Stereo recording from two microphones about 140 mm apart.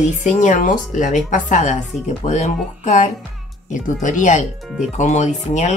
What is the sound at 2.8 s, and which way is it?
Speech, 55° left (ahead or behind).